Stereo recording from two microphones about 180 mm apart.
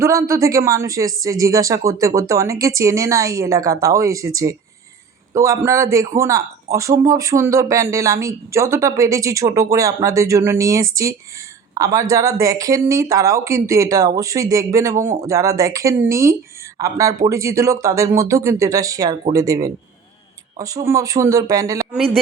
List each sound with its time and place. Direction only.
0.0 s speech: 15° right (ahead or behind)
21.9 s a man's voice: 5° left (ahead or behind)